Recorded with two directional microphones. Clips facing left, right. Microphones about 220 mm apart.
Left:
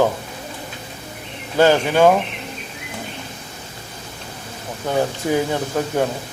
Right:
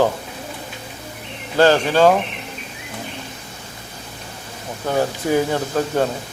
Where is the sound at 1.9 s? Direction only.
10° left (ahead or behind).